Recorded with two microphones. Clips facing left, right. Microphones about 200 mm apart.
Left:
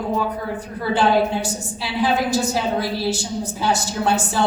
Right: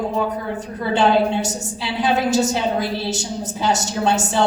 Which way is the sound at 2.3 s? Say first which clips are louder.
Right 2 dB; 20° right (ahead or behind).